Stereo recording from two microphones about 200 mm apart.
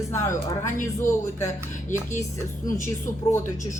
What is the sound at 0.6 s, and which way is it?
Speech, 40° left (ahead or behind).